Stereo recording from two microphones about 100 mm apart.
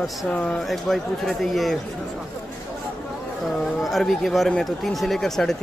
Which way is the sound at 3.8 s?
Centre (ahead or behind).